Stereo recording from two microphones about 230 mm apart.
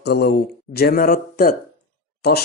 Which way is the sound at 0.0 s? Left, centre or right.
Left.